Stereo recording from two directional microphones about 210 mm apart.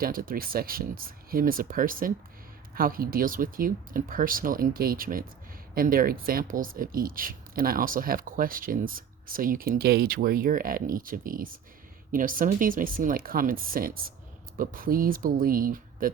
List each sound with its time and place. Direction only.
0.0 s speech: 45° right (ahead or behind)